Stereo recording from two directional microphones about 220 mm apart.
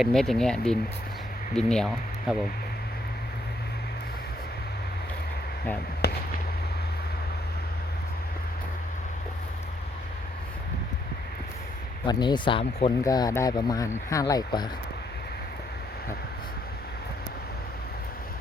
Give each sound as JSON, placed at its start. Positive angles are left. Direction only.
{"t": 0.0, "sound": "speech", "side_deg": 0}
{"t": 6.0, "sound": "a sound", "side_deg": 45}
{"t": 12.0, "sound": "speech", "side_deg": 20}